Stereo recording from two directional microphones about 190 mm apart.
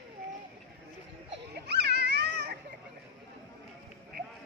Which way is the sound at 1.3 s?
60° right (ahead or behind).